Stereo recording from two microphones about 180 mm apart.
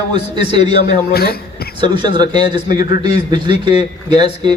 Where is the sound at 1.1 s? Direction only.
60° left (ahead or behind).